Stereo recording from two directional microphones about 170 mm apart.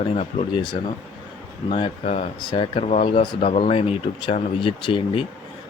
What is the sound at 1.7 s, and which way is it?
Speech, 35° left (ahead or behind).